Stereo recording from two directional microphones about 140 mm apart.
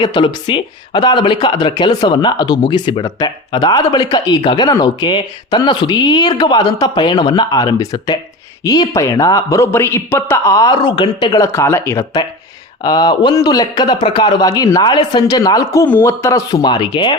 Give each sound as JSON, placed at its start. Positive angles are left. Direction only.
{"t": 0.0, "sound": "a man's voice", "side_deg": 30}
{"t": 12.8, "sound": "a man's voice", "side_deg": 30}